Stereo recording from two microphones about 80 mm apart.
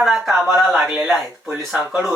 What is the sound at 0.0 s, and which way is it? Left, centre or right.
Speech, centre.